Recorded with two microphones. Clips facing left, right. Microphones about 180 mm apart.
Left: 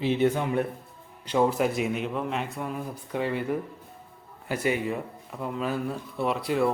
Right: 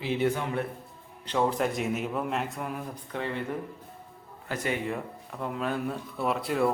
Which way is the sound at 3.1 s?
10° left (ahead or behind).